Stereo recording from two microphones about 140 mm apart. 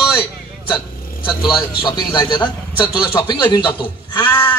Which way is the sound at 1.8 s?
30° left (ahead or behind).